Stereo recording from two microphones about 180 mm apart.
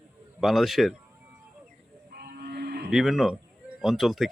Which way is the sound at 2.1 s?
60° right (ahead or behind).